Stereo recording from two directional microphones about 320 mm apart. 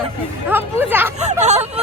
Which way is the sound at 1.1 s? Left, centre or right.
Right.